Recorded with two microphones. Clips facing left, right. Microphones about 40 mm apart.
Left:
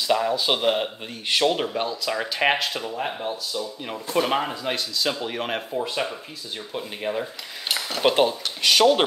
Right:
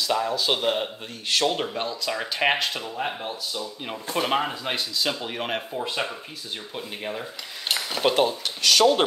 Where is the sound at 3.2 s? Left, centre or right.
Centre.